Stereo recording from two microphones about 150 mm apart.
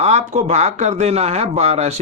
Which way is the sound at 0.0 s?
50° right (ahead or behind).